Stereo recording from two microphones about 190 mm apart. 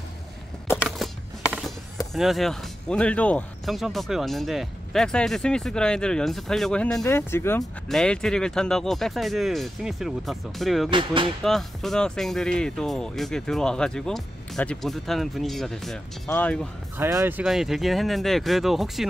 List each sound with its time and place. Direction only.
0.8 s music: centre (ahead or behind)
2.1 s speech: centre (ahead or behind)
10.9 s speech: 25° right (ahead or behind)
11.4 s speech: centre (ahead or behind)
17.0 s speech: 10° right (ahead or behind)